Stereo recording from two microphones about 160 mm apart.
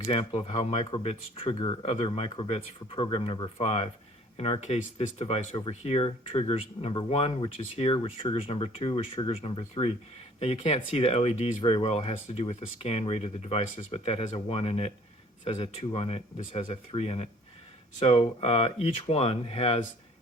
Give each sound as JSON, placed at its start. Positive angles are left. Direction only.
{"t": 0.0, "sound": "speech", "side_deg": 35}